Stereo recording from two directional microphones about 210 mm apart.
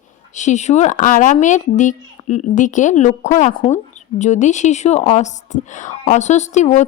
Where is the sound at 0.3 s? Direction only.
35° left (ahead or behind).